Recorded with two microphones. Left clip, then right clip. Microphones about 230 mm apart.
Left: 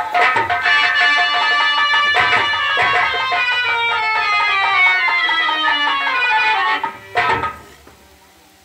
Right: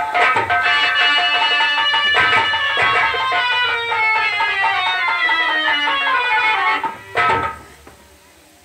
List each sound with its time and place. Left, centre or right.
0.1 s music: left